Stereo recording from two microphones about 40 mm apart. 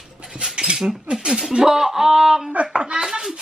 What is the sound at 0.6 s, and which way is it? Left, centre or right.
Speech, centre.